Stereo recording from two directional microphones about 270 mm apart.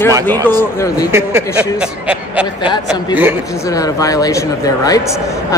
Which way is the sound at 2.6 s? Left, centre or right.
Centre.